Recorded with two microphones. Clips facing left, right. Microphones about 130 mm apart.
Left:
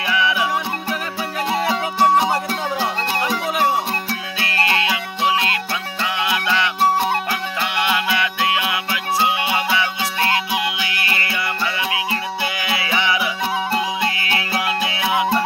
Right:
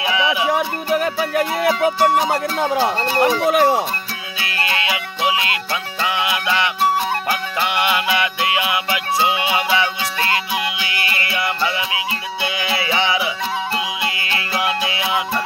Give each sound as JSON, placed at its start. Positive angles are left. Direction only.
{"t": 0.0, "sound": "music", "side_deg": -20}
{"t": 0.5, "sound": "music", "side_deg": -60}
{"t": 5.2, "sound": "music", "side_deg": -15}
{"t": 10.9, "sound": "music", "side_deg": -20}
{"t": 14.5, "sound": "music", "side_deg": -20}